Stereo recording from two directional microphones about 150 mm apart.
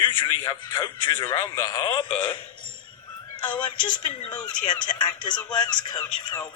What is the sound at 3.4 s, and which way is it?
Speech, 30° left (ahead or behind).